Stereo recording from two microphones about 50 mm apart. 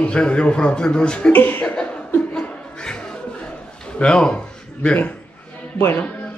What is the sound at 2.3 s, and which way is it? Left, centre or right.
Chuckle, centre.